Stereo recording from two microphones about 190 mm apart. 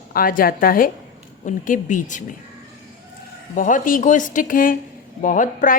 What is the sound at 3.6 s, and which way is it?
A woman's voice, 45° left (ahead or behind).